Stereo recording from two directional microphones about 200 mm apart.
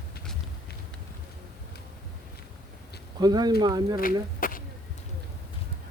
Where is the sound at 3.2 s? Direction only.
20° right (ahead or behind).